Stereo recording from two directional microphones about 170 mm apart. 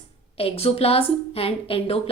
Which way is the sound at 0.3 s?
35° left (ahead or behind).